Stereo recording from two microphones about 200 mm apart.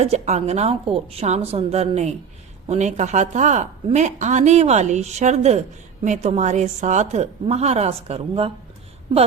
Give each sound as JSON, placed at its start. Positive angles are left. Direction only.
{"t": 0.0, "sound": "a woman's voice", "side_deg": -35}